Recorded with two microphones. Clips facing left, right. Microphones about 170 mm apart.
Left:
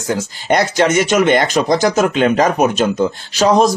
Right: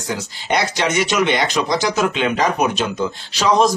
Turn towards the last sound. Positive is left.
turn(degrees=45)  # may be behind; listen again after turning